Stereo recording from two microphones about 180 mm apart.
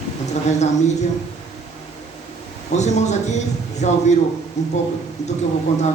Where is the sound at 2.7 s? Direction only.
40° left (ahead or behind).